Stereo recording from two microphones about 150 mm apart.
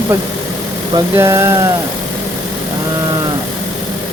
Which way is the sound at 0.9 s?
20° right (ahead or behind).